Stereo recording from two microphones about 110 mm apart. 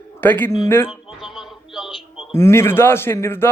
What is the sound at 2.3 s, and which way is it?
A man's voice, 25° left (ahead or behind).